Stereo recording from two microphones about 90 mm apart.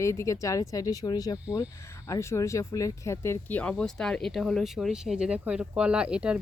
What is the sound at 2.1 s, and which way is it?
A woman's voice, 30° left (ahead or behind).